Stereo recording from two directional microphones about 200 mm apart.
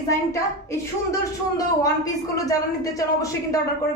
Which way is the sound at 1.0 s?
15° left (ahead or behind).